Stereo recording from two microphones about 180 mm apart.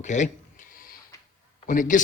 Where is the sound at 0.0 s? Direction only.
40° left (ahead or behind).